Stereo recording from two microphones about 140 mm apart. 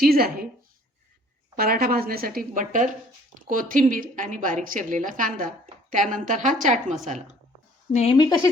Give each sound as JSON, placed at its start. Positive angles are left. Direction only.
{"t": 0.0, "sound": "a woman's voice", "side_deg": -90}
{"t": 1.5, "sound": "a woman's voice", "side_deg": -90}
{"t": 8.1, "sound": "speech", "side_deg": 30}